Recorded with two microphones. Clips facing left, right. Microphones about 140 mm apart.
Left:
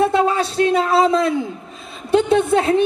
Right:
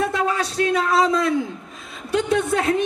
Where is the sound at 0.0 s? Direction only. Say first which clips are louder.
Left 6 dB; 25° left (ahead or behind).